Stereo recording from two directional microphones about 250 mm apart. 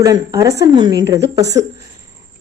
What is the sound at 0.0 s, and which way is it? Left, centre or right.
A woman's voice, centre.